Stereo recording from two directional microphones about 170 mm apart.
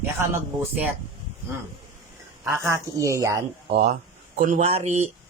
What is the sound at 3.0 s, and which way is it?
Speech, 20° right (ahead or behind).